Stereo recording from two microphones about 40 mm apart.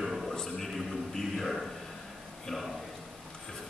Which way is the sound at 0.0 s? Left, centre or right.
Centre.